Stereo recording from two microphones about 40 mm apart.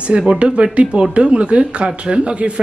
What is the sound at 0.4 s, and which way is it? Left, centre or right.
Speech, right.